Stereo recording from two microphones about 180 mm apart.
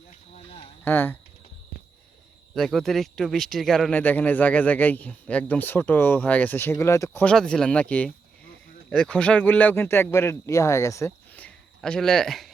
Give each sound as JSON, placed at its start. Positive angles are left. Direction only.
{"t": 0.3, "sound": "a sound", "side_deg": 35}
{"t": 0.9, "sound": "speech", "side_deg": 10}
{"t": 2.6, "sound": "speech", "side_deg": 0}